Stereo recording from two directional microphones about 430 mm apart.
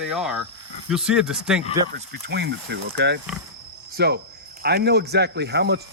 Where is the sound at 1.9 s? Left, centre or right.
Right.